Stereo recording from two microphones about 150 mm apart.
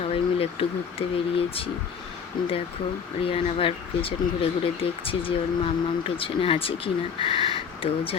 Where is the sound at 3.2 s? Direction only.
40° left (ahead or behind).